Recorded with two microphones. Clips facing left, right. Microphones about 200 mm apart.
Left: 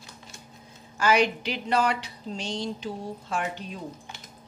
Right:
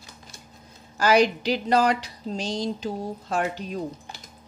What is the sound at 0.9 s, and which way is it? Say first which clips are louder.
A woman's voice: right 3 dB; 35° right (ahead or behind).